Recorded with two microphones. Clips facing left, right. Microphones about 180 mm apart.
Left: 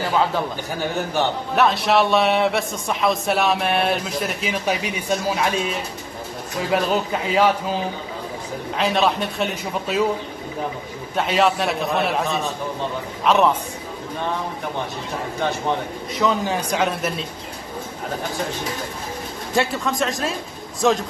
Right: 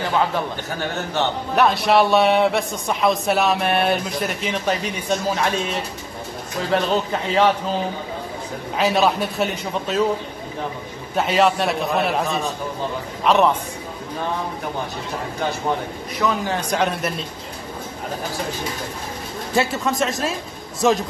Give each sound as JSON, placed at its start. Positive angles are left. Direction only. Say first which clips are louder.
{"t": 1.5, "sound": "a man's voice", "louder": "right 2 dB", "side_deg": 0}
{"t": 6.7, "sound": "a man's voice", "louder": "right 1 dB", "side_deg": 5}
{"t": 8.7, "sound": "a man's voice", "louder": "right 2 dB", "side_deg": 0}
{"t": 11.1, "sound": "a man's voice", "louder": "right 1 dB", "side_deg": 0}
{"t": 16.2, "sound": "a man's voice", "louder": "left 1 dB", "side_deg": 15}
{"t": 16.7, "sound": "a man's voice", "louder": "right 1 dB", "side_deg": 0}
{"t": 19.5, "sound": "a man's voice", "louder": "right 1 dB", "side_deg": 0}